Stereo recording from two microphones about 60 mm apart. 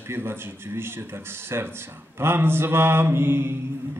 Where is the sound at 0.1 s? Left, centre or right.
Right.